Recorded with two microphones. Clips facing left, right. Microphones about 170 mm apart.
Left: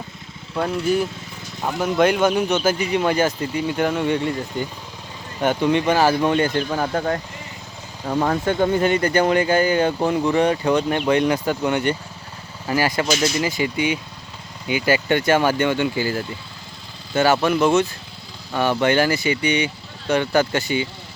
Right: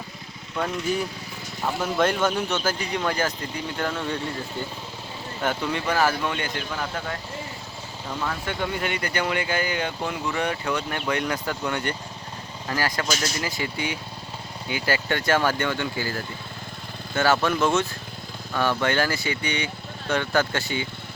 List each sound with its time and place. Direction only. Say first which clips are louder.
0.5 s speech: left 6 dB; 10° left (ahead or behind)
5.4 s speech: left 8 dB; 20° left (ahead or behind)